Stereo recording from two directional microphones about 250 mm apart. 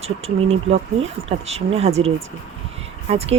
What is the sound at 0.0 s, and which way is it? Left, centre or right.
Speech, right.